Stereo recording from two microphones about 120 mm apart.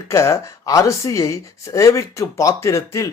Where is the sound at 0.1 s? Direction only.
25° left (ahead or behind).